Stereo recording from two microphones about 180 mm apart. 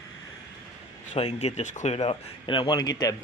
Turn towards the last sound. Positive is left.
turn(degrees=20)  # may be behind; listen again after turning